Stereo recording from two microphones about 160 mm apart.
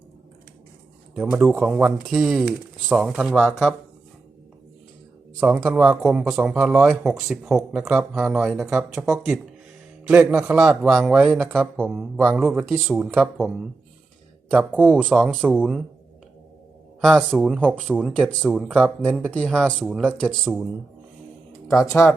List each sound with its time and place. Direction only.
1.1 s speech: 10° right (ahead or behind)
5.5 s speech: 5° right (ahead or behind)
14.5 s speech: 10° right (ahead or behind)
15.0 s speech: centre (ahead or behind)
17.0 s speech: centre (ahead or behind)
17.9 s speech: 10° right (ahead or behind)
18.3 s speech: 5° left (ahead or behind)
21.7 s speech: 20° left (ahead or behind)